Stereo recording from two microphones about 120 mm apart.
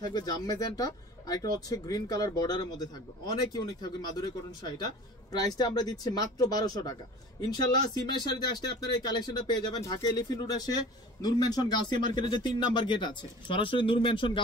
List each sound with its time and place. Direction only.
0.1 s speech: 35° left (ahead or behind)